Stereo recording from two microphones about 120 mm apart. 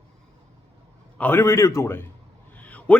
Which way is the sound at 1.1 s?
15° left (ahead or behind).